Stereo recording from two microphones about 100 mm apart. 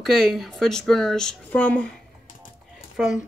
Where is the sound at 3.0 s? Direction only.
10° right (ahead or behind).